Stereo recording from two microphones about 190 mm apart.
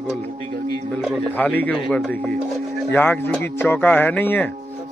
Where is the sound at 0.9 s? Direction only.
5° left (ahead or behind).